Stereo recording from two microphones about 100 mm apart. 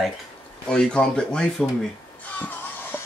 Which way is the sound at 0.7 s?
10° left (ahead or behind).